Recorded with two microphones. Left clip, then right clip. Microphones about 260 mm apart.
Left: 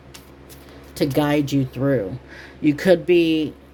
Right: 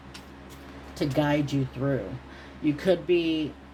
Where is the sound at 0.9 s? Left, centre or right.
Left.